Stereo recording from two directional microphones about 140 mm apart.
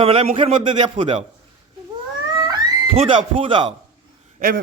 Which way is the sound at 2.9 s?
40° right (ahead or behind).